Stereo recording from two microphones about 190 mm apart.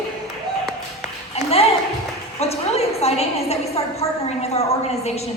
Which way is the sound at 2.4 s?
35° left (ahead or behind).